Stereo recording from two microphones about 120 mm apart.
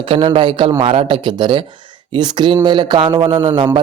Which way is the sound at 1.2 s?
40° right (ahead or behind).